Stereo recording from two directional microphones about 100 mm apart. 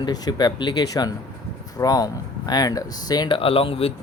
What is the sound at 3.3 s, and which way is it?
Speech, 65° left (ahead or behind).